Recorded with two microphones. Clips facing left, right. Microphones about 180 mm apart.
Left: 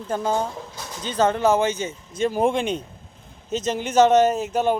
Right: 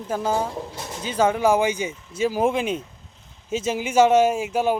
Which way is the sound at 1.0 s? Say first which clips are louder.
Even; 10° right (ahead or behind).